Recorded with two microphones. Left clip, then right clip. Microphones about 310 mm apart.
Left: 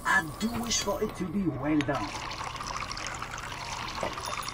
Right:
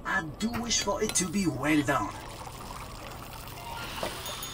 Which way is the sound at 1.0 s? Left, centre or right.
Right.